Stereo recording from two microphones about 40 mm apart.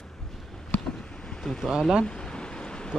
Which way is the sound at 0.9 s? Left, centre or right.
Left.